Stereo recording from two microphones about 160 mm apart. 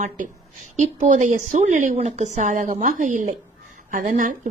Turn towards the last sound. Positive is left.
turn(degrees=-55)  # may be behind; listen again after turning